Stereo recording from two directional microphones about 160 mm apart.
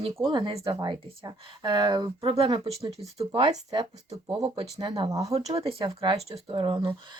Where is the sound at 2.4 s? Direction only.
35° right (ahead or behind).